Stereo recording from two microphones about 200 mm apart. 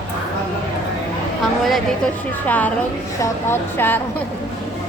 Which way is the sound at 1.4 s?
Centre (ahead or behind).